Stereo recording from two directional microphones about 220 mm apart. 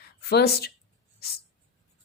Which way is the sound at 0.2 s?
45° left (ahead or behind).